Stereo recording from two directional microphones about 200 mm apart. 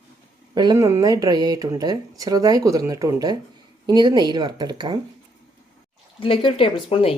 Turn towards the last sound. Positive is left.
turn(degrees=25)  # may be behind; listen again after turning